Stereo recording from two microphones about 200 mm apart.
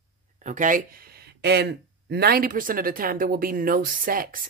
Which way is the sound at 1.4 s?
55° right (ahead or behind).